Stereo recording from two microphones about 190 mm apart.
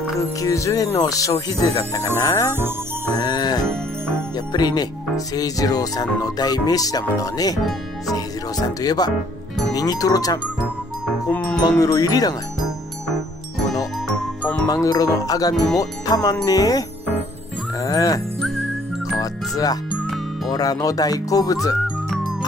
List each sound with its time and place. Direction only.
0.4 s speech: 15° left (ahead or behind)
11.2 s music: 5° left (ahead or behind)
11.8 s speech: 20° left (ahead or behind)
14.7 s speech: 20° left (ahead or behind)
17.8 s speech: 20° left (ahead or behind)
19.1 s music: 20° left (ahead or behind)
20.4 s speech: 20° left (ahead or behind)